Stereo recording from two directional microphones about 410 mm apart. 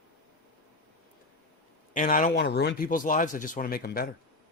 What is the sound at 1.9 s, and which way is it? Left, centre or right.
Speech, centre.